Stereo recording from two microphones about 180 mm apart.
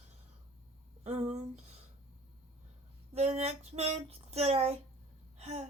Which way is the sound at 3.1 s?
40° right (ahead or behind).